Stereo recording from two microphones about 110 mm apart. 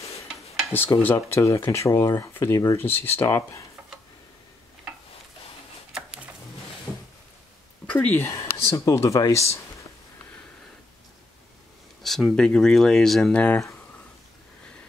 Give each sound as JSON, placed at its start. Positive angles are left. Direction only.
{"t": 0.7, "sound": "speech", "side_deg": 25}
{"t": 7.8, "sound": "speech", "side_deg": 15}
{"t": 12.0, "sound": "speech", "side_deg": 0}